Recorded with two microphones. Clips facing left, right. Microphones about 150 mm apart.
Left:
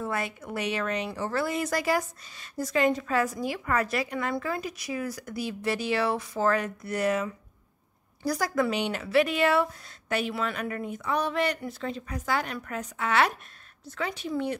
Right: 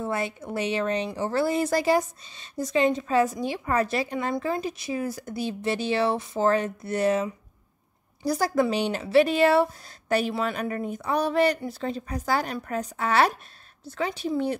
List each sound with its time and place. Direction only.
0.0 s a woman's voice: 25° right (ahead or behind)